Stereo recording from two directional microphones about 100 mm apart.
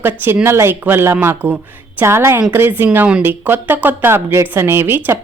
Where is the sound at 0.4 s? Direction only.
25° right (ahead or behind).